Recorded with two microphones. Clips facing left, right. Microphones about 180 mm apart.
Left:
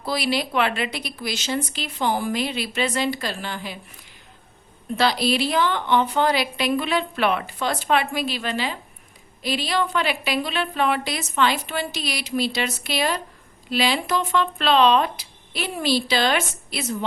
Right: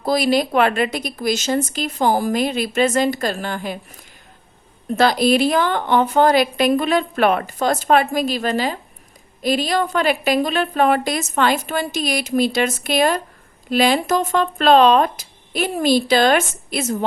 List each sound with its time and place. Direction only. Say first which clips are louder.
0.0 s a woman's voice: right 7 dB; 45° right (ahead or behind)
4.9 s a woman's voice: right 6 dB; 50° right (ahead or behind)